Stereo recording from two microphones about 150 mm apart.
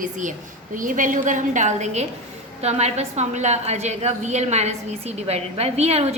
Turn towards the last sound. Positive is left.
turn(degrees=-45)  # may be behind; listen again after turning